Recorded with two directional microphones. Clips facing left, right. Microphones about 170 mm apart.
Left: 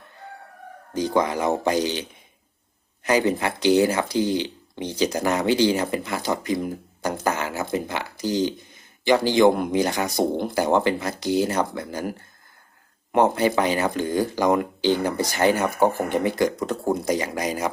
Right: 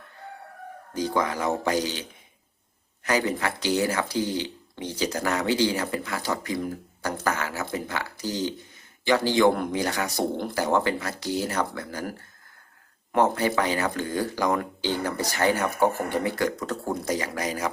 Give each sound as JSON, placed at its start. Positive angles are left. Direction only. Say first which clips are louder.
{"t": 0.9, "sound": "speech", "louder": "left 4 dB", "side_deg": 20}
{"t": 13.1, "sound": "speech", "louder": "left 3 dB", "side_deg": 20}